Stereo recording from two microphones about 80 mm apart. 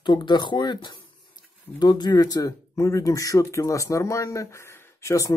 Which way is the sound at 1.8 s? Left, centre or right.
Left.